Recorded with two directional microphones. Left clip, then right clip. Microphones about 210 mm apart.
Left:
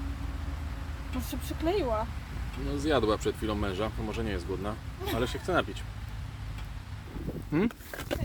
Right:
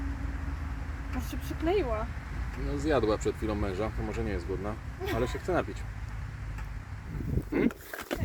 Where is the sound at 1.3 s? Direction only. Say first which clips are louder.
Right 1 dB; 35° left (ahead or behind).